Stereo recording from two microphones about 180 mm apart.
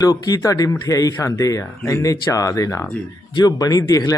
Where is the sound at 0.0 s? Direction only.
20° left (ahead or behind).